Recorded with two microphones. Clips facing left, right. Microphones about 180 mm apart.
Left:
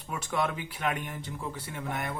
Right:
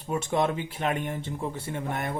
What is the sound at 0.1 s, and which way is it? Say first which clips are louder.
A man's voice: right 5 dB; 25° right (ahead or behind).